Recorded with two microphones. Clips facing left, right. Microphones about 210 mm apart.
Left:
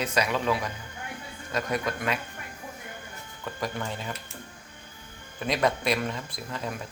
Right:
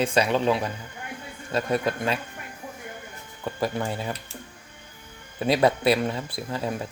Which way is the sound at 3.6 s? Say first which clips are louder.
Right 5 dB; 35° right (ahead or behind).